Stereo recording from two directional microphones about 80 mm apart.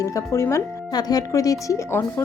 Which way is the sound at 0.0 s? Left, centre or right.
Left.